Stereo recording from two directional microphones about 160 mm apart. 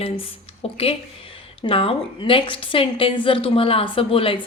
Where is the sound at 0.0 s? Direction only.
35° left (ahead or behind).